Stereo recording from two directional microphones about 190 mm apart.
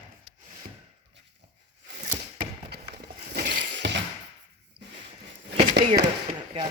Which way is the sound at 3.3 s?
55° right (ahead or behind).